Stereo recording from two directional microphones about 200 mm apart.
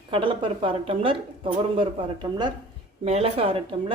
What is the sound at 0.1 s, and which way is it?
Speech, 25° right (ahead or behind).